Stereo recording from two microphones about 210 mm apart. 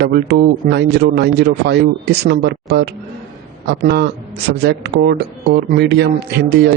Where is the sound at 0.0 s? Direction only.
50° right (ahead or behind).